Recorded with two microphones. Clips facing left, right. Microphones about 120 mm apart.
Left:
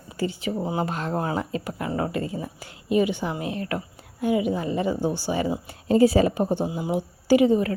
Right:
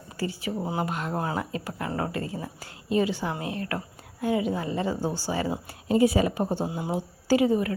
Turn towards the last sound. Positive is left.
turn(degrees=25)  # may be behind; listen again after turning